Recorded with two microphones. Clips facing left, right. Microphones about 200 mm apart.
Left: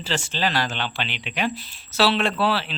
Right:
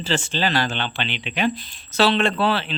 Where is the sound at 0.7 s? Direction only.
5° left (ahead or behind).